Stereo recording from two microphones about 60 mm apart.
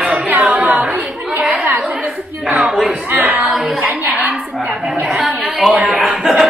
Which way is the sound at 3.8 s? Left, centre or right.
Right.